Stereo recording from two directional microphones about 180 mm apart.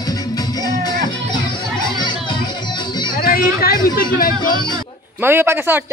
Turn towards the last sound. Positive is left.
turn(degrees=-10)  # may be behind; listen again after turning